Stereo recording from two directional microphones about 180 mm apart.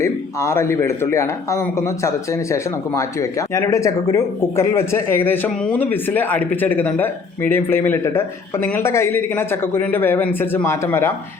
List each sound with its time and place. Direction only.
0.0 s speech: 15° left (ahead or behind)